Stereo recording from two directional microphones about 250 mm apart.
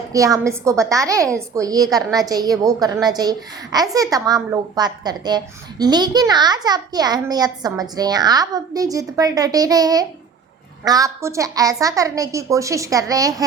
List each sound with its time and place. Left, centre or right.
0.1 s a child's voice: centre